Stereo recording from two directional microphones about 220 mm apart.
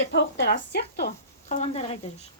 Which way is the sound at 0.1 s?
50° left (ahead or behind).